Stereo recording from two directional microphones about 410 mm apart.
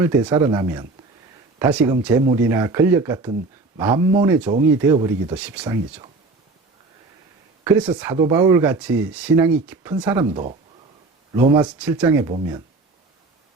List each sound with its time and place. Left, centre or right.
0.0 s speech: centre
7.6 s speech: centre
10.3 s speech: centre
11.5 s speech: centre